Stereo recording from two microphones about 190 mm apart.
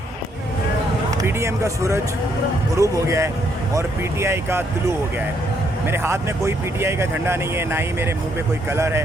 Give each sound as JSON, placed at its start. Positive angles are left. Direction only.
{"t": 1.2, "sound": "speech", "side_deg": -15}